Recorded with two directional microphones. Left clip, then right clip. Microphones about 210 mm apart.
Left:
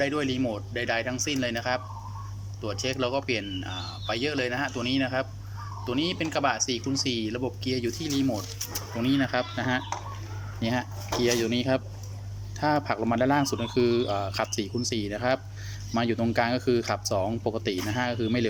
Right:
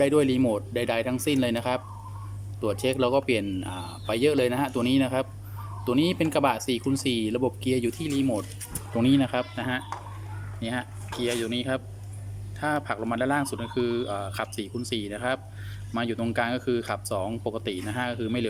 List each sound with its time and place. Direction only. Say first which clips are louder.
0.0 s speech: right 5 dB; 20° right (ahead or behind); by 18.4 s centre (ahead or behind)